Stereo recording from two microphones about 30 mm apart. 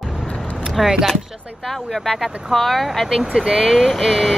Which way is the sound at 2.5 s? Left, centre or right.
Centre.